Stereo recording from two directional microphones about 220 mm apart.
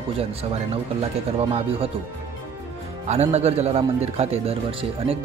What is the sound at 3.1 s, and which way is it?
A man's voice, 30° right (ahead or behind).